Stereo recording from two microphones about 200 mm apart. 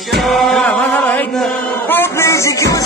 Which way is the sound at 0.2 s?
Centre (ahead or behind).